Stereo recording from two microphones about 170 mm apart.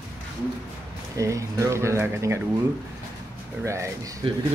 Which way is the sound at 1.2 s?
20° right (ahead or behind).